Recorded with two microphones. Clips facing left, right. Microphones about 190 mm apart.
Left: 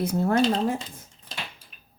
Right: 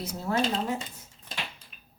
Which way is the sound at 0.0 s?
55° left (ahead or behind).